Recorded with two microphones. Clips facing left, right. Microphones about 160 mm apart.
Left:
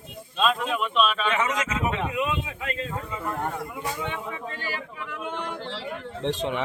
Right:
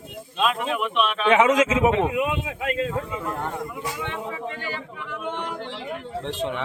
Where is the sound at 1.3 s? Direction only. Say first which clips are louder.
Right 9 dB; 90° right.